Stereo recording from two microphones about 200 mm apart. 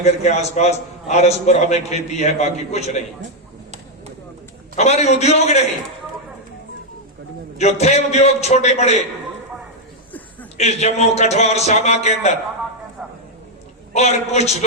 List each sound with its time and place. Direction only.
0.0 s a man's voice: 35° left (ahead or behind)
4.8 s a man's voice: 35° left (ahead or behind)
7.6 s a man's voice: 35° left (ahead or behind)
10.6 s a man's voice: 35° left (ahead or behind)
13.0 s a sound: centre (ahead or behind)
13.9 s a man's voice: 35° left (ahead or behind)